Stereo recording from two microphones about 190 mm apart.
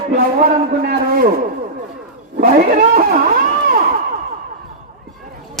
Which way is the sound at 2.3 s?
45° right (ahead or behind).